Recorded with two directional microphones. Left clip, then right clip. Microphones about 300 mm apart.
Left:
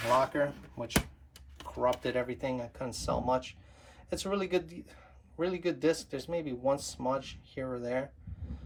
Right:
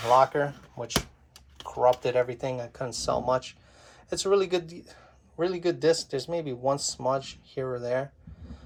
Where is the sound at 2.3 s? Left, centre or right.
Centre.